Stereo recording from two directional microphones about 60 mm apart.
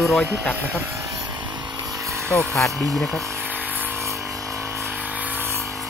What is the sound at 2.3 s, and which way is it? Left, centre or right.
Speech, centre.